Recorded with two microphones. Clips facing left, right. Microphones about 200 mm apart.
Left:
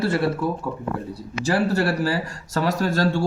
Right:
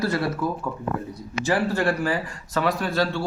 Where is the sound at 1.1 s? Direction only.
35° left (ahead or behind).